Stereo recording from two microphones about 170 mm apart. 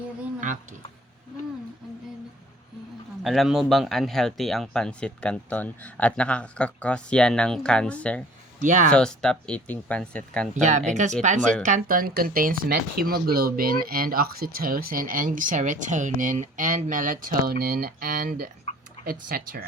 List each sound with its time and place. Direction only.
0.3 s a sound: 50° right (ahead or behind)
3.2 s speech: centre (ahead or behind)
8.6 s speech: 50° right (ahead or behind)
8.9 s speech: 5° left (ahead or behind)
10.5 s speech: 45° right (ahead or behind)